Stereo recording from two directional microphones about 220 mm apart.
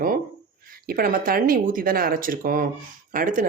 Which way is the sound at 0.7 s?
40° right (ahead or behind).